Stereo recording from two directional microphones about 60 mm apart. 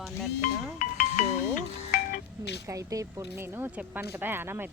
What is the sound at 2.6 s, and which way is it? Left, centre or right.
Speech, right.